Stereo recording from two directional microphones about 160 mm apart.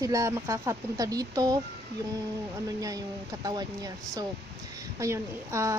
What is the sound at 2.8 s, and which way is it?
Speech, 20° right (ahead or behind).